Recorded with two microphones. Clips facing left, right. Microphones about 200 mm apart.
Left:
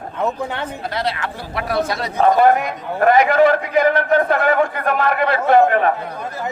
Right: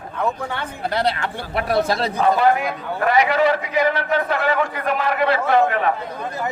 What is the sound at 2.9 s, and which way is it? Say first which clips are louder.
A man's voice: left 5 dB; 50° left (ahead or behind).